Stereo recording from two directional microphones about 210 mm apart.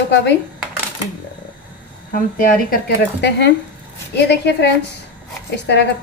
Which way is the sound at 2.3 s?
50° left (ahead or behind).